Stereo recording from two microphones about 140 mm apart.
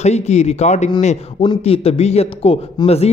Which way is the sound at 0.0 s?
55° left (ahead or behind).